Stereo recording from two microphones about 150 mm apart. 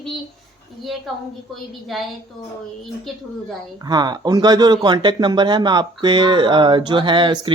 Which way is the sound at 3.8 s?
30° right (ahead or behind).